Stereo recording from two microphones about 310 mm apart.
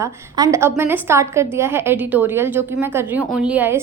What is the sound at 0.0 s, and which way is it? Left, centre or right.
A woman's voice, centre.